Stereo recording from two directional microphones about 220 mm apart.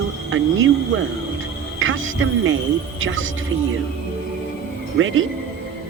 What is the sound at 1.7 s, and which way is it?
Music, 60° right (ahead or behind).